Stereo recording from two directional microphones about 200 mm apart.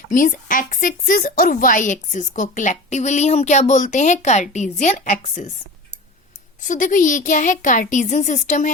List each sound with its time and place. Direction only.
0.1 s a woman's voice: 40° left (ahead or behind)
6.7 s a woman's voice: 40° left (ahead or behind)